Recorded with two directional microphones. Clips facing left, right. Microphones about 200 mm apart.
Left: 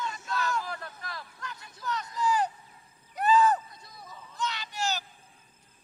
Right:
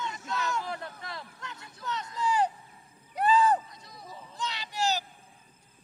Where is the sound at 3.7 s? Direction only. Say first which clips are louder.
Right 1 dB; 80° right.